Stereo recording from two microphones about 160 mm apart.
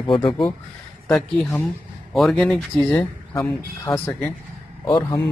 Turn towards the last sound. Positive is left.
turn(degrees=20)  # may be behind; listen again after turning